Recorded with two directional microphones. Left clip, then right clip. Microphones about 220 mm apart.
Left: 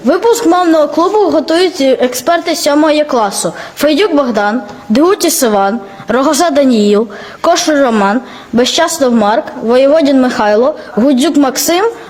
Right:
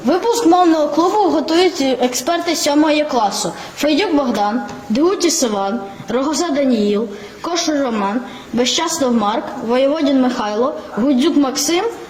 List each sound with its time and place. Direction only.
0.1 s a man's voice: 50° left (ahead or behind)